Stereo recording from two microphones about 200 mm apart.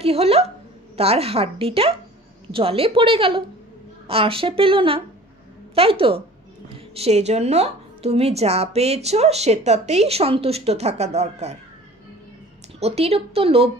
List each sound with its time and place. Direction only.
0.0 s a woman's voice: 30° right (ahead or behind)
12.8 s a woman's voice: 30° right (ahead or behind)